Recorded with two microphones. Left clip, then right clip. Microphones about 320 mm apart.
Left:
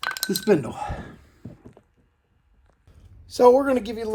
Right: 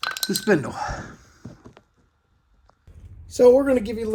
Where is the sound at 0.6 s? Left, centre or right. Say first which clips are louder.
Right 1 dB; centre.